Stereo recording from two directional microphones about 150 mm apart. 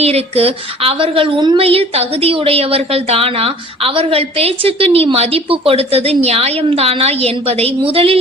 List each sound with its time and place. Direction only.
0.0 s a woman's voice: 45° right (ahead or behind)